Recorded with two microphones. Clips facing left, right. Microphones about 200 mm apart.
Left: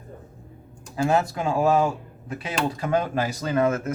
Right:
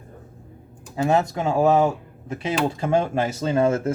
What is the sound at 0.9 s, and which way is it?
Speech, 20° right (ahead or behind).